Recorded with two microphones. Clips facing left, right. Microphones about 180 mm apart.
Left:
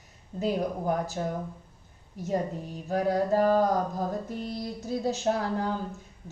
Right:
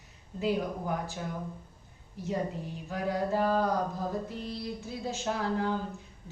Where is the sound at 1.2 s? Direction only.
40° left (ahead or behind).